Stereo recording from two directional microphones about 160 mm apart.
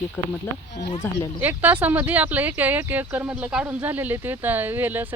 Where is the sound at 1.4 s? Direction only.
10° right (ahead or behind).